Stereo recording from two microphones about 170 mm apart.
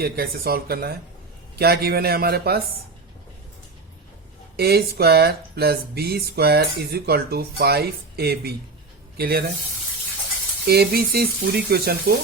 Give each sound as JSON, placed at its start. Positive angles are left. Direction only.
{"t": 0.0, "sound": "speech", "side_deg": -65}
{"t": 4.5, "sound": "speech", "side_deg": -70}
{"t": 10.7, "sound": "speech", "side_deg": -65}